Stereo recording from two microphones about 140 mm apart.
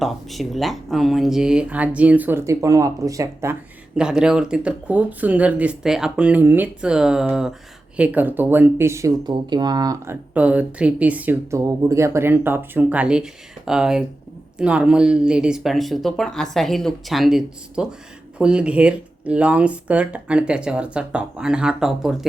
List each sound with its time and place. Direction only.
0.0 s speech: centre (ahead or behind); by 3.6 s 20° right (ahead or behind)
3.9 s speech: 5° right (ahead or behind); by 10.2 s 25° right (ahead or behind)
10.3 s speech: 10° right (ahead or behind)